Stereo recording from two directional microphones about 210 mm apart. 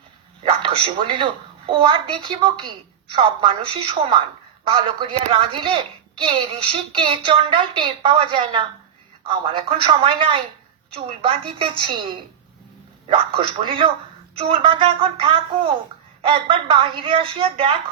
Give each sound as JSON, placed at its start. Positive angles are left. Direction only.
{"t": 0.4, "sound": "speech", "side_deg": -25}